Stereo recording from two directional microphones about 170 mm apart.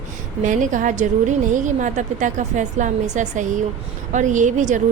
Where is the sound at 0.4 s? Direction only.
50° right (ahead or behind).